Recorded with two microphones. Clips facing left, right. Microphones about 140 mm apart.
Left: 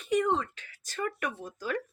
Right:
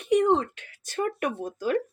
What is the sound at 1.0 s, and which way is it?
Speech, 50° right (ahead or behind).